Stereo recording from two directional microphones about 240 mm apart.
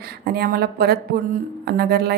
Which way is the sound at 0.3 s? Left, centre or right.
Right.